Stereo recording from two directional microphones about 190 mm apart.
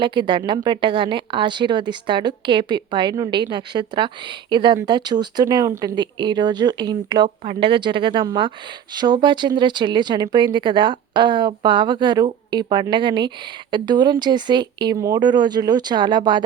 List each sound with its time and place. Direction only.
0.0 s speech: 25° right (ahead or behind)